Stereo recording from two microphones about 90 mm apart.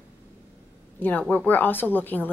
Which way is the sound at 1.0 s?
20° left (ahead or behind).